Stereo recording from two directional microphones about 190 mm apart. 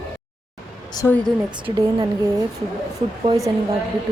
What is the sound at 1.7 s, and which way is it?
Speech, 20° right (ahead or behind).